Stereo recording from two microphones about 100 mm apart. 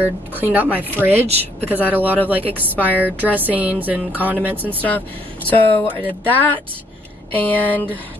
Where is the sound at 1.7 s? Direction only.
15° right (ahead or behind).